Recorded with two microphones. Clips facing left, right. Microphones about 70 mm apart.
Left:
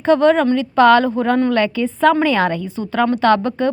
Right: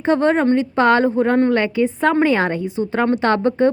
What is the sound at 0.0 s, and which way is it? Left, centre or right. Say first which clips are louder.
A woman's voice: left 3 dB; right.